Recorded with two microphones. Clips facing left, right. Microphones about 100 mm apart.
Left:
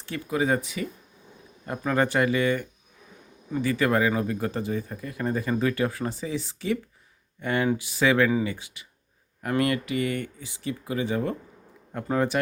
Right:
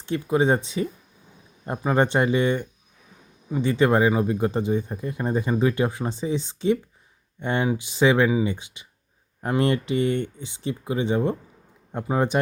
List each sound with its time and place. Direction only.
0.0 s speech: 25° right (ahead or behind)